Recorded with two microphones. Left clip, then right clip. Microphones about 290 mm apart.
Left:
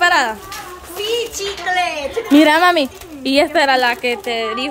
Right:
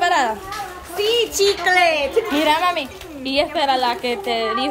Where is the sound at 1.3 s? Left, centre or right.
Centre.